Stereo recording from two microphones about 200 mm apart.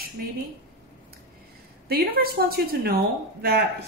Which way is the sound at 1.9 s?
50° right (ahead or behind).